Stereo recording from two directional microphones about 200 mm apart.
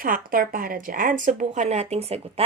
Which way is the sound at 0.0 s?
45° right (ahead or behind).